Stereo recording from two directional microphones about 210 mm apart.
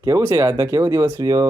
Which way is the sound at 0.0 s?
15° right (ahead or behind).